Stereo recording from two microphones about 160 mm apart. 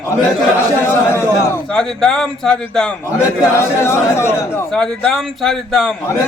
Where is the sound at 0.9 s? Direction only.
15° left (ahead or behind).